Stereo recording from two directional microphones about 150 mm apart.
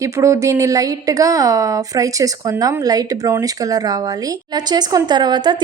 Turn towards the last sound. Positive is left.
turn(degrees=-30)  # may be behind; listen again after turning